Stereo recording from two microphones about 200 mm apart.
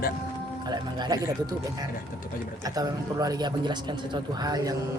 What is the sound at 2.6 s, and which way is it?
Speech, 20° right (ahead or behind).